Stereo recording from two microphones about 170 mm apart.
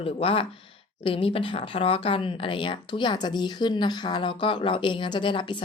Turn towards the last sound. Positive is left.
turn(degrees=30)  # may be behind; listen again after turning